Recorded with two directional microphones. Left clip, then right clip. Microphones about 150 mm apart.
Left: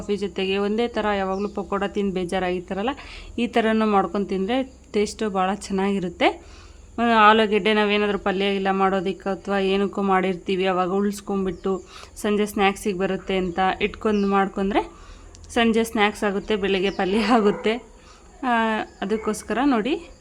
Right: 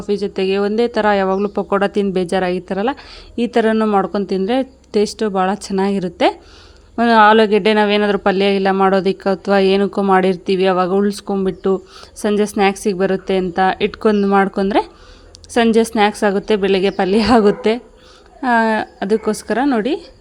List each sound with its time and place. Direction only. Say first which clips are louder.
0.0 s speech: right 7 dB; 25° right (ahead or behind)